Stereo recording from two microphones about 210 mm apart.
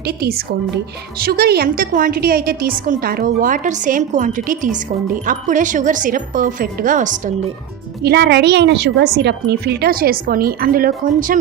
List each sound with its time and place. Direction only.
0.0 s a woman's voice: 45° right (ahead or behind)
8.0 s a woman's voice: 50° right (ahead or behind)